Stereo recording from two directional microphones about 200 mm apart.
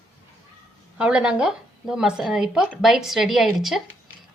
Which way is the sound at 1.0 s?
5° right (ahead or behind).